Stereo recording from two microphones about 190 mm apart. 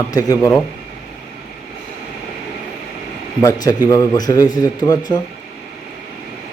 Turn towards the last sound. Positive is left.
turn(degrees=20)  # may be behind; listen again after turning